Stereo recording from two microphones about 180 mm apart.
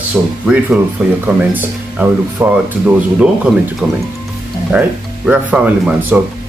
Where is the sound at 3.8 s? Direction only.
5° right (ahead or behind).